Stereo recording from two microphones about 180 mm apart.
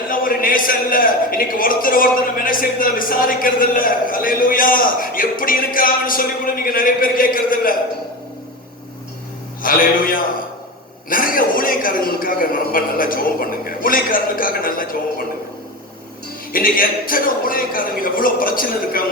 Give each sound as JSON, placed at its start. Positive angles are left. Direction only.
{"t": 0.1, "sound": "a man's voice", "side_deg": 50}
{"t": 9.6, "sound": "a man's voice", "side_deg": 50}
{"t": 16.5, "sound": "a man's voice", "side_deg": 50}